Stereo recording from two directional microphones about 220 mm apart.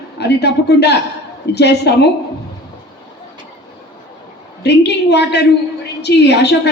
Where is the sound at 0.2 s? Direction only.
50° left (ahead or behind).